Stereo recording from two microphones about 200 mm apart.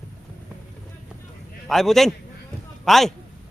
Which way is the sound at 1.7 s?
Centre (ahead or behind).